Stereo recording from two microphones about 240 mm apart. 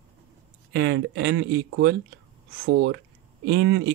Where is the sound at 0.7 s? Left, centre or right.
Right.